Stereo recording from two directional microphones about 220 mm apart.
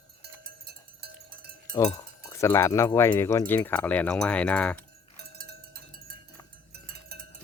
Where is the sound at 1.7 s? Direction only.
15° left (ahead or behind).